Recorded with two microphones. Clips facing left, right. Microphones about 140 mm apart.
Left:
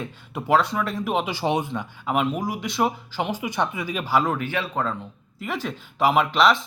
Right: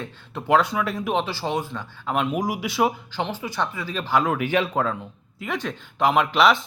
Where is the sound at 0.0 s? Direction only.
10° left (ahead or behind).